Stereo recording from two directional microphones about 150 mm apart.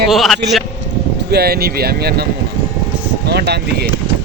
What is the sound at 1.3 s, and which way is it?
Speech, 90° right.